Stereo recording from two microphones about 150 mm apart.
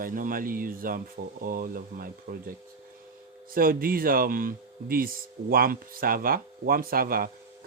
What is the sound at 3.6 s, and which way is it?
Speech, 75° right (ahead or behind).